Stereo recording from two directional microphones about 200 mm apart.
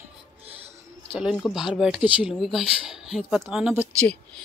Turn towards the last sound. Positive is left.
turn(degrees=-5)  # may be behind; listen again after turning